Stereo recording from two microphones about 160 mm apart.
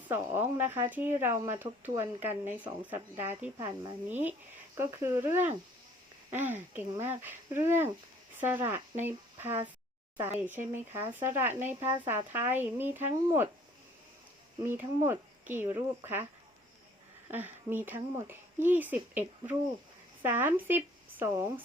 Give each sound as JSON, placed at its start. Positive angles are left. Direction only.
{"t": 0.1, "sound": "speech", "side_deg": -15}
{"t": 14.7, "sound": "speech", "side_deg": -15}
{"t": 17.3, "sound": "speech", "side_deg": -10}